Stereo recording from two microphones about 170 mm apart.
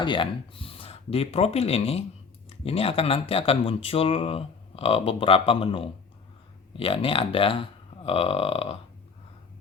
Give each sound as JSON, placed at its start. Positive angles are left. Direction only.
{"t": 0.0, "sound": "speech", "side_deg": 30}